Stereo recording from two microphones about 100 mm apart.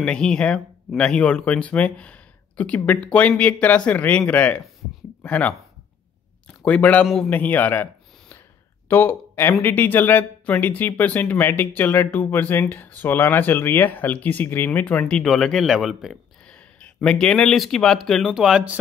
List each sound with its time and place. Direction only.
0.0 s speech: 10° left (ahead or behind)
6.6 s speech: 15° left (ahead or behind)
15.0 s speech: 5° left (ahead or behind)